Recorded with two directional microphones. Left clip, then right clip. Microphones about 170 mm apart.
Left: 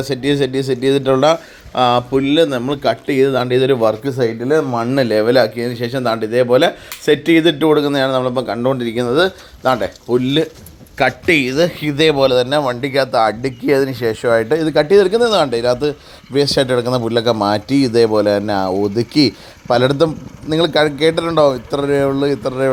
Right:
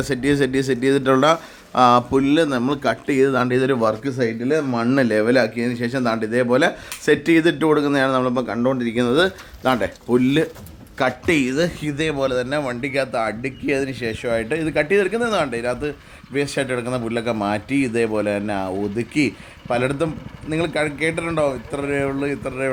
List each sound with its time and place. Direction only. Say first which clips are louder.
0.0 s speech: left 3 dB; 10° right (ahead or behind)
9.0 s speech: left 2 dB; 10° right (ahead or behind); by 22.7 s 30° left (ahead or behind)